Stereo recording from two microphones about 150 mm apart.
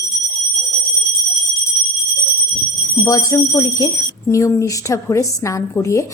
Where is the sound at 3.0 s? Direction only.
20° left (ahead or behind).